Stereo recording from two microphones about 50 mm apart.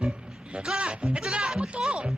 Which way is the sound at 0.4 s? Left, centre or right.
Centre.